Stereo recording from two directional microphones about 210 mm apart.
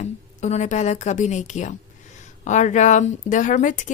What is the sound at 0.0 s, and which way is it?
A woman's voice, 35° left (ahead or behind).